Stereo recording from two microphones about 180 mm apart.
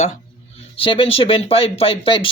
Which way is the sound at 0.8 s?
30° left (ahead or behind).